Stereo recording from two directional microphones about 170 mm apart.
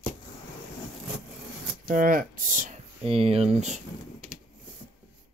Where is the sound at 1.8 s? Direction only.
55° right (ahead or behind).